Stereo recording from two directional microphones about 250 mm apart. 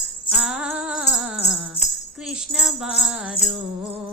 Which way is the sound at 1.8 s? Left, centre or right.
Left.